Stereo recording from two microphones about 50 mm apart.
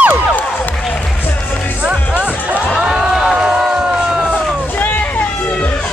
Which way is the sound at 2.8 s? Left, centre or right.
Centre.